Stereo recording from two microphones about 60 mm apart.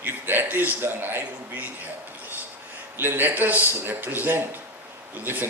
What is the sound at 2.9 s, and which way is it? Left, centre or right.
A man's voice, right.